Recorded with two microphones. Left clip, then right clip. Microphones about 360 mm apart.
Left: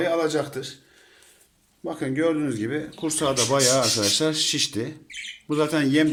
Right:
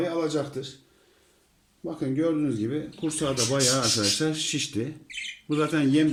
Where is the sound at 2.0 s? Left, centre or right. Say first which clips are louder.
Left 2 dB; centre.